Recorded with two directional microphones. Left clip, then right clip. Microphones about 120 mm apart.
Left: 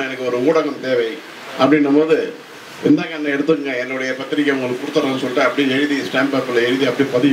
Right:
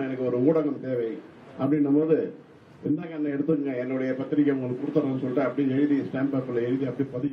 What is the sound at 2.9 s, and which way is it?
A man's voice, 20° left (ahead or behind).